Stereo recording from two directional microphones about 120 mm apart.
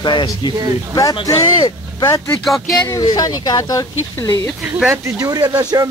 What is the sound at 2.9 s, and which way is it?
Speech, 30° left (ahead or behind).